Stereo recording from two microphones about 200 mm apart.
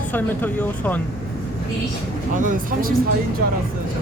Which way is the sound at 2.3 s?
40° right (ahead or behind).